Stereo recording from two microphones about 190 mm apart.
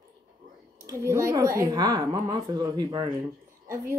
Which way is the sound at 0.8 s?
15° right (ahead or behind).